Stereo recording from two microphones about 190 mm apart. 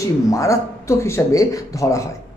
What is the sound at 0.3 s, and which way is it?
Speech, 15° left (ahead or behind).